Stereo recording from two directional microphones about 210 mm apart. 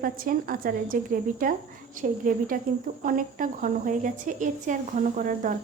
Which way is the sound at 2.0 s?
40° right (ahead or behind).